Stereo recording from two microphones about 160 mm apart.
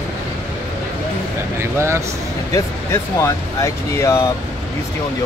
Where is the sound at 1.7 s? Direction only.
15° right (ahead or behind).